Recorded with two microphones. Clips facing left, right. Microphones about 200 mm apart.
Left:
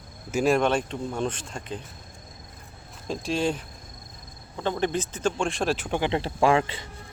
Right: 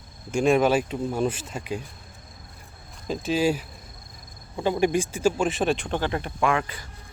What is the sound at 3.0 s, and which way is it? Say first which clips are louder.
Speech: right 3 dB; centre (ahead or behind).